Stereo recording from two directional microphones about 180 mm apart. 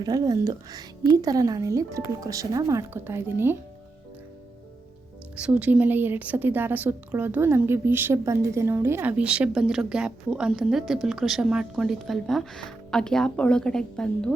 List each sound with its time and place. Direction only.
0.0 s speech: 20° right (ahead or behind)
5.4 s a woman's voice: 10° right (ahead or behind)